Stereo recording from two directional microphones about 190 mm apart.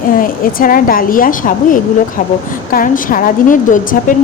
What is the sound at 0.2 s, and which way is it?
Speech, 50° left (ahead or behind).